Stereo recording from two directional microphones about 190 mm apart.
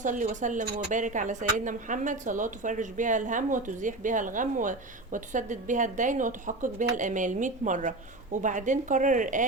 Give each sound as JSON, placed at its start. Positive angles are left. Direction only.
{"t": 0.0, "sound": "speech", "side_deg": -40}